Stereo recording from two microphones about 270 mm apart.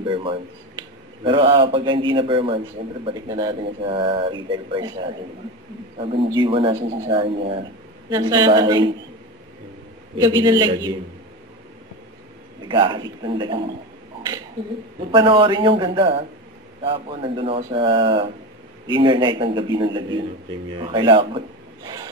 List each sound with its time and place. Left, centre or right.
0.1 s a man's voice: centre
10.4 s speech: centre
12.6 s speech: centre
15.0 s a man's voice: centre
21.8 s rub: centre